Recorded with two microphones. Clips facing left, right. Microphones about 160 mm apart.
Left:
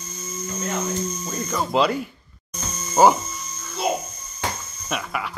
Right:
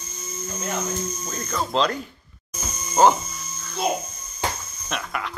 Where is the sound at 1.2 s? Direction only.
5° left (ahead or behind).